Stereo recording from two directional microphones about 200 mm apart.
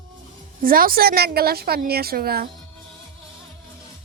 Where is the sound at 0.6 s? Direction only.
45° right (ahead or behind).